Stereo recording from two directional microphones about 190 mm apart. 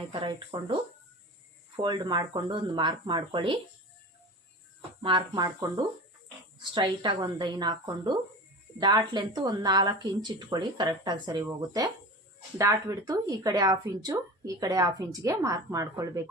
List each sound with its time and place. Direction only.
0.1 s a woman's voice: 25° right (ahead or behind)
5.0 s a woman's voice: 25° right (ahead or behind)